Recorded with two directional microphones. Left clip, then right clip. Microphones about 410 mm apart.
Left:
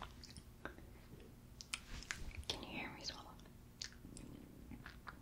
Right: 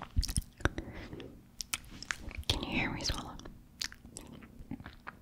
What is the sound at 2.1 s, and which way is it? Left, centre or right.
Whispering, right.